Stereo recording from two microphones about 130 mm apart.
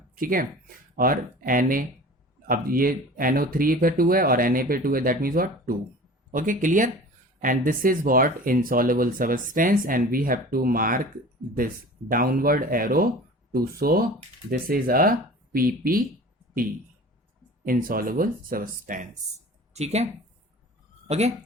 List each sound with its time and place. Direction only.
0.2 s speech: 90° right
14.7 s speech: 90° right
17.7 s speech: 90° right
19.7 s speech: 55° right (ahead or behind)
21.1 s speech: 55° right (ahead or behind)